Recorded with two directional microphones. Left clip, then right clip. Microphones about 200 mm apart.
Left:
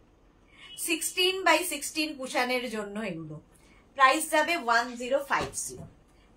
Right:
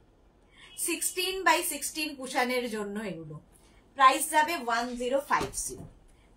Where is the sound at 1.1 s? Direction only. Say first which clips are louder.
Left 2 dB; 15° left (ahead or behind).